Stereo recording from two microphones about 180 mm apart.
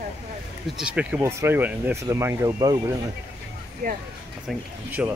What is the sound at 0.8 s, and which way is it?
Speech, 5° right (ahead or behind).